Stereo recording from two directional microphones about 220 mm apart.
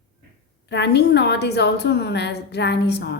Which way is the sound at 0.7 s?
50° left (ahead or behind).